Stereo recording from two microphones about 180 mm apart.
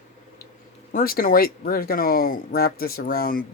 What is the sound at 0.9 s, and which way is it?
Speech, 55° left (ahead or behind).